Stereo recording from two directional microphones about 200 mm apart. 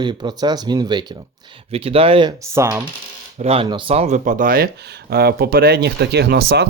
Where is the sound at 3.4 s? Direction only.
30° right (ahead or behind).